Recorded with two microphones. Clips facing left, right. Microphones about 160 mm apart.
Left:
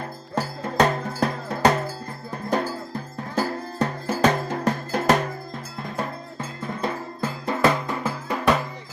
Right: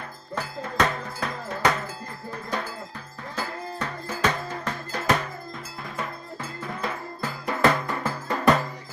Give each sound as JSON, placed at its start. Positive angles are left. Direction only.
{"t": 0.3, "sound": "cowbell", "side_deg": 40}
{"t": 4.1, "sound": "music", "side_deg": 40}
{"t": 7.2, "sound": "music", "side_deg": 20}